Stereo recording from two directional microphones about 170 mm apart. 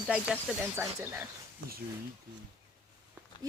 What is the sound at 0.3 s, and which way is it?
Speech, 5° right (ahead or behind).